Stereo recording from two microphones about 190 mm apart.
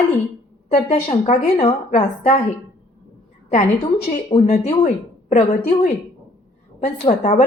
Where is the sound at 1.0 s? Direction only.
30° left (ahead or behind).